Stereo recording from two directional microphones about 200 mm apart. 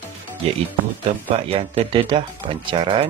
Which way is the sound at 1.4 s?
30° right (ahead or behind).